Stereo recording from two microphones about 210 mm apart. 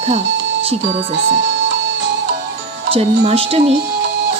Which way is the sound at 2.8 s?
30° right (ahead or behind).